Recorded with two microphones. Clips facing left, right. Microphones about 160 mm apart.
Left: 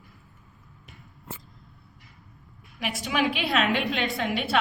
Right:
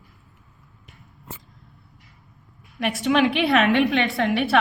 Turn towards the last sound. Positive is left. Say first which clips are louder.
# right 6 dB
turn(degrees=-70)  # may be behind; listen again after turning